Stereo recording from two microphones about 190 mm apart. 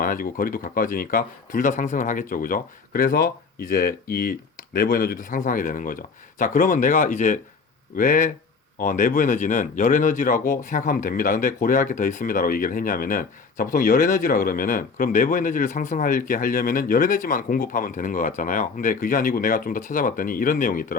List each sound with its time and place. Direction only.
0.0 s speech: 50° left (ahead or behind)